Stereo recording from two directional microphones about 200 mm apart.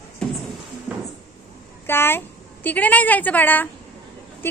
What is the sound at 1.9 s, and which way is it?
A woman's voice, 10° left (ahead or behind).